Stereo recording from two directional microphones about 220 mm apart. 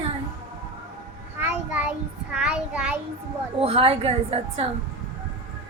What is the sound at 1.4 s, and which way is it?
A child's voice, 5° right (ahead or behind).